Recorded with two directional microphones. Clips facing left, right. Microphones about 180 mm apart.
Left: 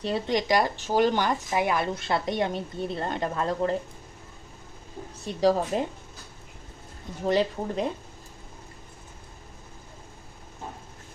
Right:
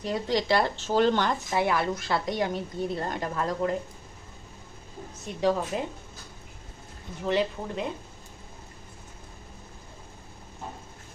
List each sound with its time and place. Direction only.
0.0 s speech: 25° left (ahead or behind)
5.2 s speech: 35° left (ahead or behind)
7.3 s speech: 40° left (ahead or behind)